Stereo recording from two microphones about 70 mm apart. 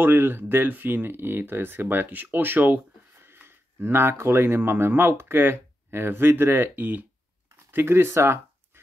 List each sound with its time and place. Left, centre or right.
0.0 s speech: right
7.5 s speech: right